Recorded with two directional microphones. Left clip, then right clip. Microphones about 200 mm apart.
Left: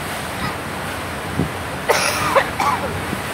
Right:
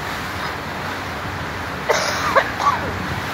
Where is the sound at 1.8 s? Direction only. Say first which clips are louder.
Left 1 dB; 55° left (ahead or behind).